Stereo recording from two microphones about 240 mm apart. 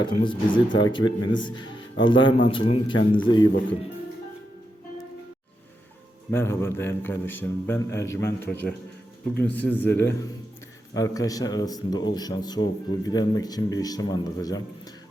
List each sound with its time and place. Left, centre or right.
0.0 s speech: centre
6.3 s speech: centre